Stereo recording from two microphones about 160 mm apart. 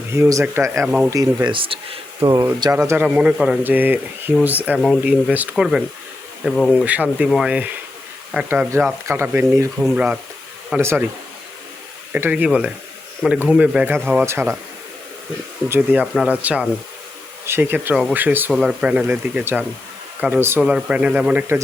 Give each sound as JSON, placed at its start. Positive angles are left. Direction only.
{"t": 0.1, "sound": "speech", "side_deg": -20}
{"t": 0.9, "sound": "speech", "side_deg": -5}
{"t": 1.1, "sound": "speech", "side_deg": -20}
{"t": 2.7, "sound": "speech", "side_deg": -15}
{"t": 6.7, "sound": "speech", "side_deg": -10}
{"t": 12.1, "sound": "speech", "side_deg": -10}
{"t": 15.7, "sound": "speech", "side_deg": -10}